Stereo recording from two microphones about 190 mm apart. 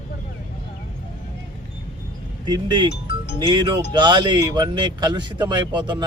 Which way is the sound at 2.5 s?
25° right (ahead or behind).